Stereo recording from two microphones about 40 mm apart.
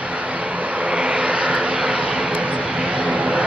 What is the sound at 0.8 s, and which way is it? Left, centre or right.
Vehicle, right.